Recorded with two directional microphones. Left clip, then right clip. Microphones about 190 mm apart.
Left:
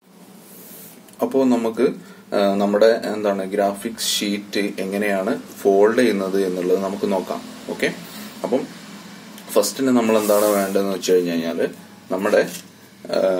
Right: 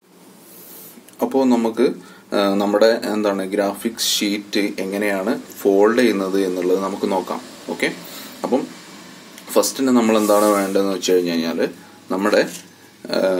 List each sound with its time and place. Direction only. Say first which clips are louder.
1.2 s speech: right 1 dB; 5° right (ahead or behind)
9.5 s speech: right 1 dB; 10° right (ahead or behind)